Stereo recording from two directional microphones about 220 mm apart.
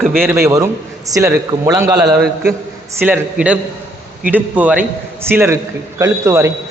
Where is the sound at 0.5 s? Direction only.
15° right (ahead or behind).